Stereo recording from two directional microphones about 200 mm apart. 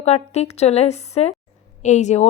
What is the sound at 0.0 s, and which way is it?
A woman's voice, 30° left (ahead or behind).